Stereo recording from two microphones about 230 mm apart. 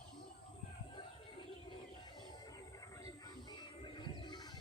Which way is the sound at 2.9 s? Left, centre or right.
Centre.